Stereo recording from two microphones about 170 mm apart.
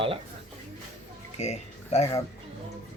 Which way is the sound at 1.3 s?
40° left (ahead or behind).